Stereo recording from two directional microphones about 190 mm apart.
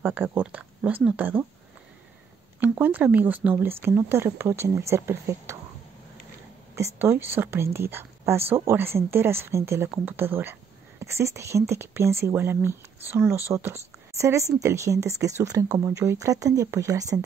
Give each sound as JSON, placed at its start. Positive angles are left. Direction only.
{"t": 0.0, "sound": "speech", "side_deg": -10}
{"t": 2.8, "sound": "speech", "side_deg": -10}
{"t": 7.0, "sound": "speech", "side_deg": -10}